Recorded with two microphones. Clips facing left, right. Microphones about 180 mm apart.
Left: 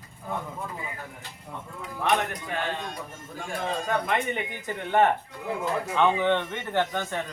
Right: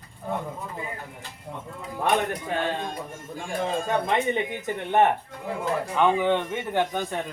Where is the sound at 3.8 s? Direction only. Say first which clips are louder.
Right 2 dB; 25° right (ahead or behind).